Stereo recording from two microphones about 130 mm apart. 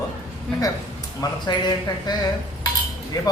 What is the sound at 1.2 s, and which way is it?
Speech, 35° left (ahead or behind).